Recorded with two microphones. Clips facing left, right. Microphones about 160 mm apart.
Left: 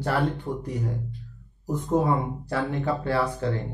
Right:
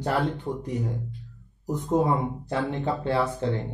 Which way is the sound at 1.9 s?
20° right (ahead or behind).